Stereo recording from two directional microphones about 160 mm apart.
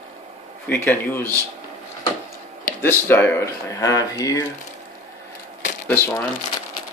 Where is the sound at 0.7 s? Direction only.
10° left (ahead or behind).